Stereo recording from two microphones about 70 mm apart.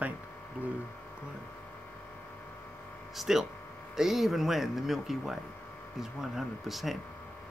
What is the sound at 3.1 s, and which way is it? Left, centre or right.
Speech, centre.